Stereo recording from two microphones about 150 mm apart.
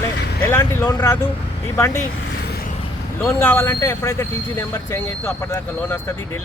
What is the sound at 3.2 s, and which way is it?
Speech, 15° left (ahead or behind).